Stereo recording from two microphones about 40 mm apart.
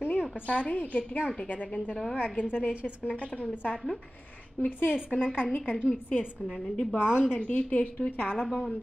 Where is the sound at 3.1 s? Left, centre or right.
Left.